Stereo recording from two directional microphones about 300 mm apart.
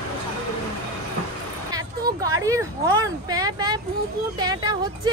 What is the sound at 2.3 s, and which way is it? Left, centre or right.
Speech, centre.